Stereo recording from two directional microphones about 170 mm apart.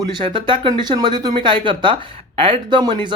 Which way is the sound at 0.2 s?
30° right (ahead or behind).